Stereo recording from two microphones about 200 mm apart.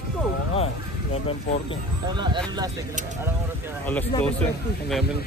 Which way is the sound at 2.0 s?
20° right (ahead or behind).